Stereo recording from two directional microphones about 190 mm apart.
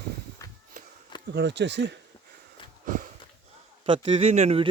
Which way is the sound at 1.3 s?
65° right (ahead or behind).